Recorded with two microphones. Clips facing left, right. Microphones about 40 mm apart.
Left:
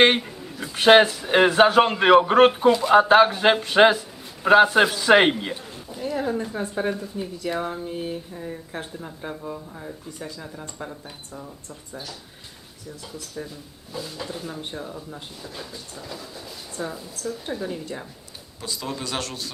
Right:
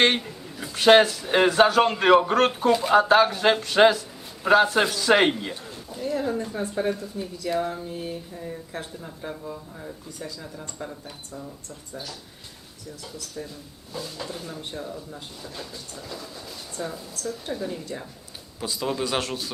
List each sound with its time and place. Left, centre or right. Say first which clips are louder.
0.0 s a man's voice: left 3 dB; centre
13.9 s a man's voice: left 1 dB; centre
16.7 s a man's voice: left 1 dB; centre
18.6 s a man's voice: right 4 dB; centre